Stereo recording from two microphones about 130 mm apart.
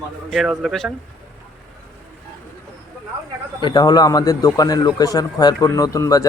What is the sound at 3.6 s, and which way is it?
A man's voice, 35° left (ahead or behind).